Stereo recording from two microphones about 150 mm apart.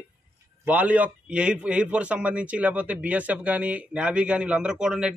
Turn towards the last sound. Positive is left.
turn(degrees=-5)  # may be behind; listen again after turning